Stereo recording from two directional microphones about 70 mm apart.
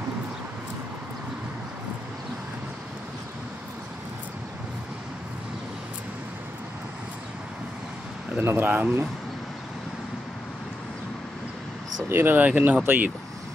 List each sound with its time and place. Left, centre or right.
8.4 s speech: right
12.1 s speech: right